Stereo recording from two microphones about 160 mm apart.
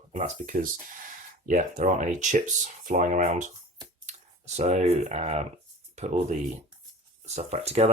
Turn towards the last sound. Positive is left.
turn(degrees=-40)  # may be behind; listen again after turning